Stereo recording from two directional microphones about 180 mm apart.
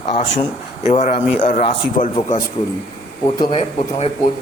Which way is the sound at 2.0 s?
50° left (ahead or behind).